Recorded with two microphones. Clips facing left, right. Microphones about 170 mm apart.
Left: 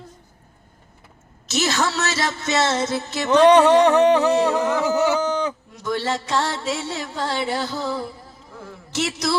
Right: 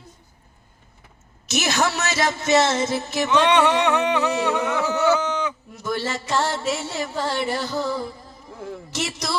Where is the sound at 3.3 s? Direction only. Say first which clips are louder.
Left 6 dB; 35° left (ahead or behind).